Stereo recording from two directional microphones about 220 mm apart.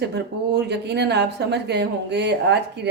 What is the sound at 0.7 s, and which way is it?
Speech, 50° right (ahead or behind).